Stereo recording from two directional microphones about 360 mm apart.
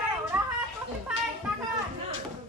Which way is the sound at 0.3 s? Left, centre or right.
Centre.